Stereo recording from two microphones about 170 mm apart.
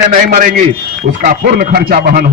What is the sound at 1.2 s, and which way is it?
Speech, 60° right (ahead or behind).